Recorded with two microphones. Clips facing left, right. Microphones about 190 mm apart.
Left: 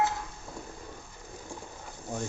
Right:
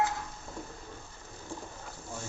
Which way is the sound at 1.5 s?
15° left (ahead or behind).